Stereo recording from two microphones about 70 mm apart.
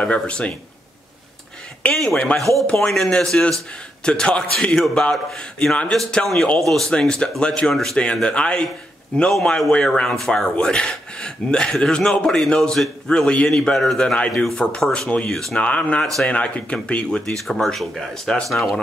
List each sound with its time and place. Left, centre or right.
0.0 s a man's voice: centre
2.3 s a man's voice: centre
15.3 s speech: centre
15.6 s a man's voice: centre
17.4 s speech: centre